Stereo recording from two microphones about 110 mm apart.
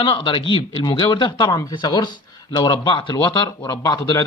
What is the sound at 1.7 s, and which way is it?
Speech, 45° left (ahead or behind).